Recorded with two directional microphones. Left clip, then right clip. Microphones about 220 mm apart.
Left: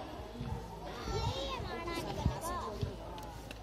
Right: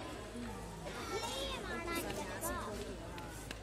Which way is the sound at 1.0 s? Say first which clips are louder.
Left 2 dB; 55° right (ahead or behind).